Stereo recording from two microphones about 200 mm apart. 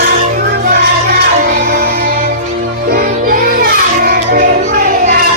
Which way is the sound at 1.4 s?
45° right (ahead or behind).